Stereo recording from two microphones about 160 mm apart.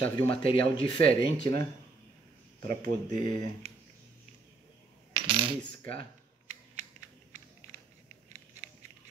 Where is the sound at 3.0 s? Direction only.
25° left (ahead or behind).